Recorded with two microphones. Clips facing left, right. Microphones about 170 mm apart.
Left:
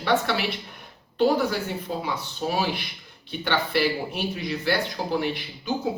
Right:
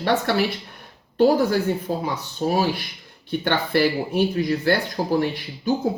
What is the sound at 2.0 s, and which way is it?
Speech, 45° right (ahead or behind).